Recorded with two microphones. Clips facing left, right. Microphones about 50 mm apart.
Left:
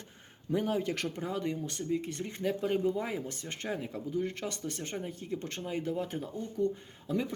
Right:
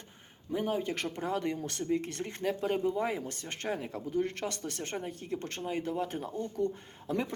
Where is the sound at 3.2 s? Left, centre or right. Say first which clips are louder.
Right 1 dB; right.